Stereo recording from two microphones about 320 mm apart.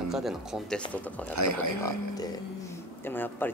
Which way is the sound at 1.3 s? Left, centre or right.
Right.